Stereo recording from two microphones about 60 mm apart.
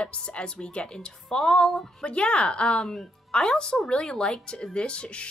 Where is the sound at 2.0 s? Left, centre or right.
Centre.